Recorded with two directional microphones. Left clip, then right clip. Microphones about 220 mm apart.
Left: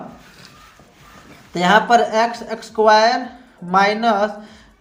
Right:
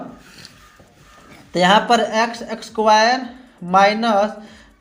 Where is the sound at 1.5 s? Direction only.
30° right (ahead or behind).